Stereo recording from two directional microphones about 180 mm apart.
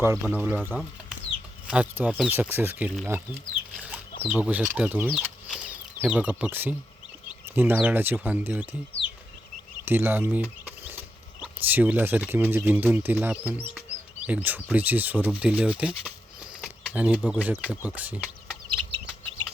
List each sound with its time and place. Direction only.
0.0 s speech: 10° right (ahead or behind)
3.8 s a sound: 5° right (ahead or behind)
4.4 s speech: 10° right (ahead or behind)
5.1 s a sound: centre (ahead or behind)
6.0 s speech: 10° right (ahead or behind)
9.8 s speech: 10° right (ahead or behind)
18.7 s chicken: 25° right (ahead or behind)